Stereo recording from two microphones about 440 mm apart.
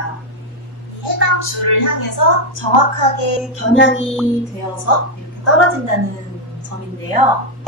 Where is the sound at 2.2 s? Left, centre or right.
Left.